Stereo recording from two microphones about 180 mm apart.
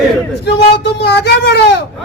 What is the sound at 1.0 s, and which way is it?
Speech, 70° left (ahead or behind).